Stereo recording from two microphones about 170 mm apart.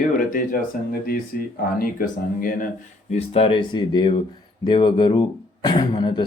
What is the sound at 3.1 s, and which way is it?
Speech, 35° left (ahead or behind).